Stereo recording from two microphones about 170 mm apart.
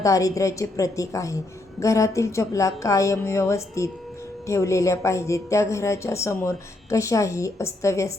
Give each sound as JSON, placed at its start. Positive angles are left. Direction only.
{"t": 0.0, "sound": "a woman's voice", "side_deg": 20}